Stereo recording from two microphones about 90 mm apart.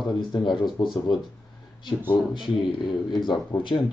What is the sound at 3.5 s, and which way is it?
Speech, 25° left (ahead or behind).